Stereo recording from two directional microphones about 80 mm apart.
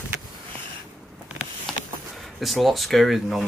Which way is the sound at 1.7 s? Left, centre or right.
Centre.